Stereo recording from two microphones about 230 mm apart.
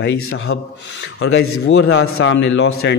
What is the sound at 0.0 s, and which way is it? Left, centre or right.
Speech, left.